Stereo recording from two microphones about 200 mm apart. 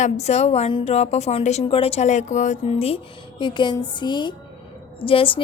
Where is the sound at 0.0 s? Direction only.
35° left (ahead or behind).